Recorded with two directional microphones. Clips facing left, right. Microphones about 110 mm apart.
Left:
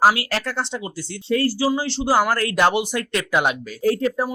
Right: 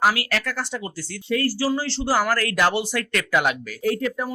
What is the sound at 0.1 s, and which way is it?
Speech, 30° left (ahead or behind).